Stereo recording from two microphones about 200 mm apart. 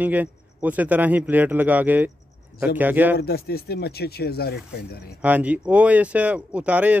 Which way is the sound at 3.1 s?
50° left (ahead or behind).